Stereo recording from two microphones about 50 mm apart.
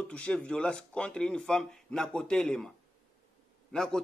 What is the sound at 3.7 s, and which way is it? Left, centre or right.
Speech, centre.